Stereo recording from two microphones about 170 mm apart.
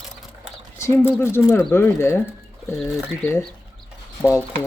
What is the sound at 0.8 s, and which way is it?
Speech, 15° left (ahead or behind).